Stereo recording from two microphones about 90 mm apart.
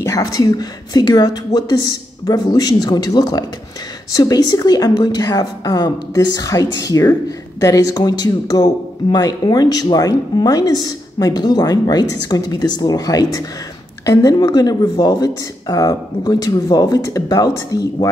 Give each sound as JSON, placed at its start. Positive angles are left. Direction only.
{"t": 0.0, "sound": "speech", "side_deg": 45}